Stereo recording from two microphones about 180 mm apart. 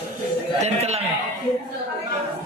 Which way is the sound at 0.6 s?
35° right (ahead or behind).